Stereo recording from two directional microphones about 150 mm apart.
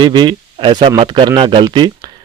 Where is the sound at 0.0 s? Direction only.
30° right (ahead or behind).